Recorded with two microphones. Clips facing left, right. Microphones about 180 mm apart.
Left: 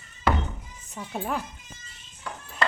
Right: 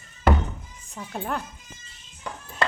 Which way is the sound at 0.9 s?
5° left (ahead or behind).